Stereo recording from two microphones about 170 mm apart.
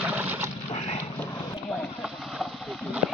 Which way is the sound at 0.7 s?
40° left (ahead or behind).